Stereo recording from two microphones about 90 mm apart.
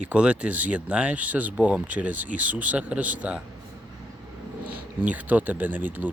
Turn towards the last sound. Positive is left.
turn(degrees=-20)  # may be behind; listen again after turning